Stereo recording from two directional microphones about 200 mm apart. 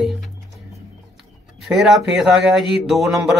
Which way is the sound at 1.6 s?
Centre (ahead or behind).